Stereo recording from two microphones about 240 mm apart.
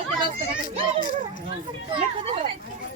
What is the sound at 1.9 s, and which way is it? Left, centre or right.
Speech, right.